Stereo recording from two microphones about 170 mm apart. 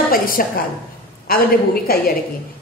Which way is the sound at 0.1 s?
55° left (ahead or behind).